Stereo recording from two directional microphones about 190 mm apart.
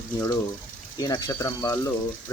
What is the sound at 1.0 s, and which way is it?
Speech, 20° left (ahead or behind).